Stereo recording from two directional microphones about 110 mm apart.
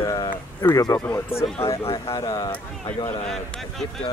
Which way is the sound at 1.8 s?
50° left (ahead or behind).